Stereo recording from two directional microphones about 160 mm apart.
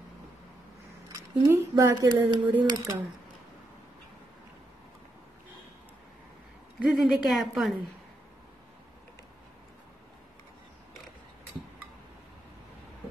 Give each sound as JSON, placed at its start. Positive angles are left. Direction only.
{"t": 1.1, "sound": "speech", "side_deg": -20}
{"t": 6.8, "sound": "a woman's voice", "side_deg": -5}